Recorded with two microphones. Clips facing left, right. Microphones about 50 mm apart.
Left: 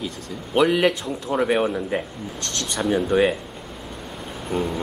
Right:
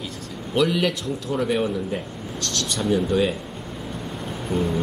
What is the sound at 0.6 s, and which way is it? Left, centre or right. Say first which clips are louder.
Speech: left 3 dB; left.